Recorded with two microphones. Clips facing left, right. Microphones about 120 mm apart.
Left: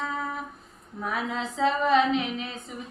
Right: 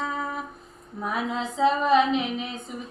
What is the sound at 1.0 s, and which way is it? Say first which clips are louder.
Female singing: right 2 dB; 15° right (ahead or behind).